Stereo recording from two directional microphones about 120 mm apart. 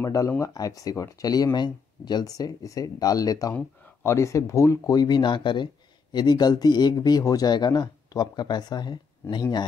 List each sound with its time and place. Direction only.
0.0 s speech: 25° left (ahead or behind)
3.5 s speech: 15° left (ahead or behind); by 9.7 s 35° left (ahead or behind)